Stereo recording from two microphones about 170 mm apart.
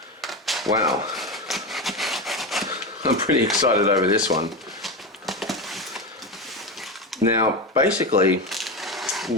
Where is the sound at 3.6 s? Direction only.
20° right (ahead or behind).